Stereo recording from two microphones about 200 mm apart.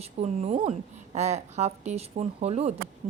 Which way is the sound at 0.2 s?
25° right (ahead or behind).